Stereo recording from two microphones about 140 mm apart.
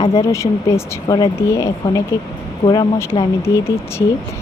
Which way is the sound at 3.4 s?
20° left (ahead or behind).